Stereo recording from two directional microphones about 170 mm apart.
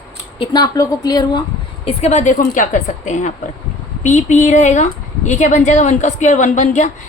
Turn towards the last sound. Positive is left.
turn(degrees=45)  # may be behind; listen again after turning